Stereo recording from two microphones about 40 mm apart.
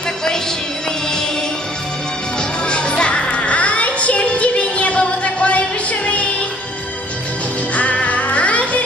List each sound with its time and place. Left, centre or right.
2.6 s music: left
7.7 s music: left